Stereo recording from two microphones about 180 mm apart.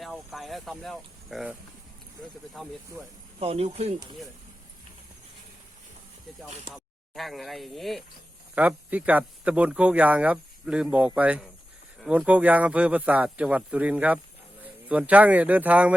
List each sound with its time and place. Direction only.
0.0 s speech: centre (ahead or behind)
2.6 s speech: centre (ahead or behind)
3.4 s speech: 35° right (ahead or behind)
6.5 s speech: 40° right (ahead or behind)
6.7 s speech: centre (ahead or behind)